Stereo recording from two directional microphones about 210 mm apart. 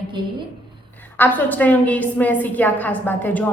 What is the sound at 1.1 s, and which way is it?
A woman's voice, 10° left (ahead or behind).